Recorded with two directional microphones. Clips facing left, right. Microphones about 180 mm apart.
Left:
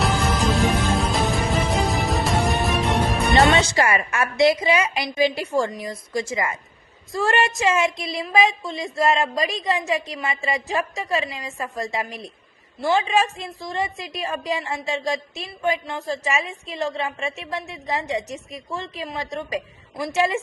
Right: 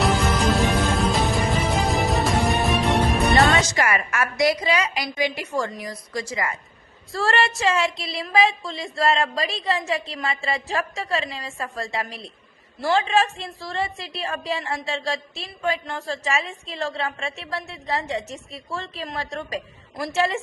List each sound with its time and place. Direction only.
0.0 s music: centre (ahead or behind)
3.4 s a woman's voice: 25° left (ahead or behind)